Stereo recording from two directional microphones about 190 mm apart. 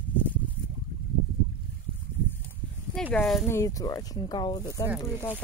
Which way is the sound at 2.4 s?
5° left (ahead or behind).